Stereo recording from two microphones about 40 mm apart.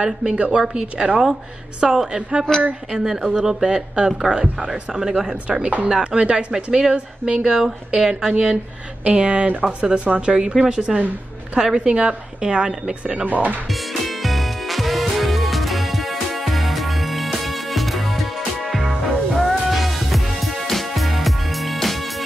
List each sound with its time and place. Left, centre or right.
0.0 s speech: centre
0.4 s speech: right
0.7 s a woman's voice: centre
2.5 s a woman's voice: centre
2.9 s a woman's voice: centre
4.6 s a woman's voice: centre; by 10.5 s right
10.5 s a woman's voice: centre
13.2 s speech: right
13.7 s music: centre